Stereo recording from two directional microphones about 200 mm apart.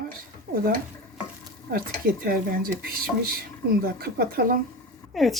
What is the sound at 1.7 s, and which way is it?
Speech, 50° right (ahead or behind).